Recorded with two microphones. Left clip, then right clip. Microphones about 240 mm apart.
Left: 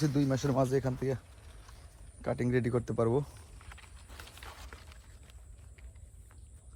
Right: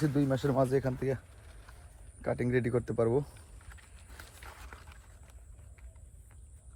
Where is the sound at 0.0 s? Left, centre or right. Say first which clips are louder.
Right 1 dB; left.